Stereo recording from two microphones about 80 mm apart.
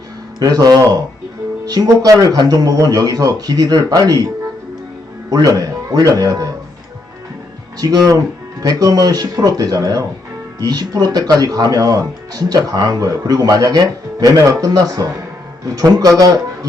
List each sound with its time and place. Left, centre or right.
0.3 s speech: right
5.3 s speech: right
7.8 s speech: right